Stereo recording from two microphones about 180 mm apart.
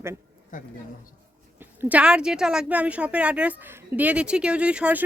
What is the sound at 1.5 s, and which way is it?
Speech, 10° right (ahead or behind).